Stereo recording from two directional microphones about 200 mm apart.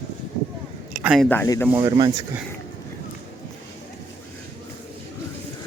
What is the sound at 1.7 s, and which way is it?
Speech, 20° right (ahead or behind).